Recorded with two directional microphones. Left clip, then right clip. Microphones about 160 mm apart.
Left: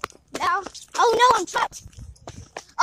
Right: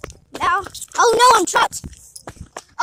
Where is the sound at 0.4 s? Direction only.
35° right (ahead or behind).